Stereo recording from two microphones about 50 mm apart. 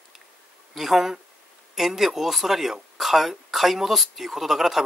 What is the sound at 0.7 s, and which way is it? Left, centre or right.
Speech, centre.